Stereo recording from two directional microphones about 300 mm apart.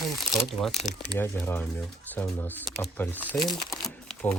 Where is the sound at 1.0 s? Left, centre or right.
Centre.